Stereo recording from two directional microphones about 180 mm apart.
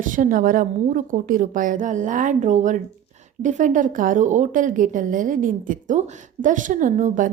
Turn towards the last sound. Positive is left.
turn(degrees=-45)  # may be behind; listen again after turning